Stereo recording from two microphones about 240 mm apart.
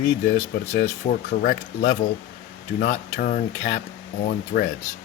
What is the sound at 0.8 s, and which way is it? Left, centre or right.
Speech, left.